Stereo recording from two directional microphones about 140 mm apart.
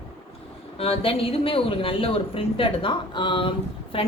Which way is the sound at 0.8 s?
45° left (ahead or behind).